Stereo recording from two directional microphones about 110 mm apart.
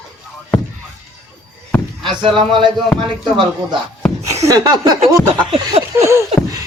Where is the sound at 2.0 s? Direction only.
45° right (ahead or behind).